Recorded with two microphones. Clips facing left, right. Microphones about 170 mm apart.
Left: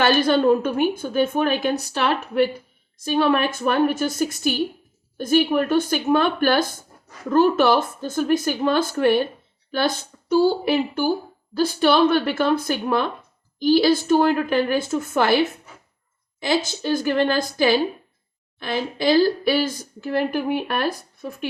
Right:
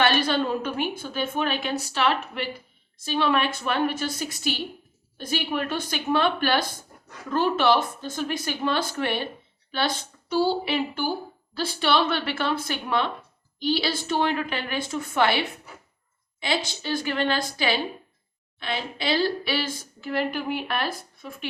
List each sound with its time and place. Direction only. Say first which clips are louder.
0.0 s a woman's voice: left 5 dB; 45° left (ahead or behind)
10.2 s a woman's voice: left 6 dB; 45° left (ahead or behind)
16.8 s a woman's voice: left 7 dB; 45° left (ahead or behind)